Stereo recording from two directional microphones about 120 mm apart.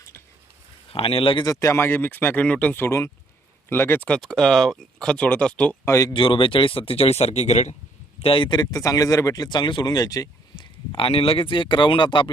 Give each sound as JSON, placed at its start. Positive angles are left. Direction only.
{"t": 0.9, "sound": "speech", "side_deg": 50}
{"t": 1.5, "sound": "speech", "side_deg": 25}
{"t": 4.2, "sound": "speech", "side_deg": 0}
{"t": 5.8, "sound": "speech", "side_deg": 25}
{"t": 6.1, "sound": "speech", "side_deg": 45}
{"t": 8.2, "sound": "speech", "side_deg": 45}